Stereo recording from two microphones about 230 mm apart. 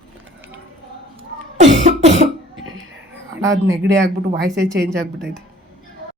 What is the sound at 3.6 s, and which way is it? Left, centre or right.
Speech, right.